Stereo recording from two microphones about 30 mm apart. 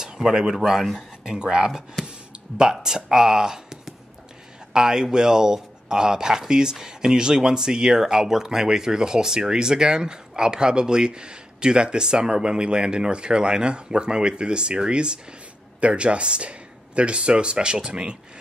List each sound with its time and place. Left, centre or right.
0.0 s speech: centre
0.6 s speech: centre
2.0 s a sound: right
2.7 s speech: centre
4.7 s speech: right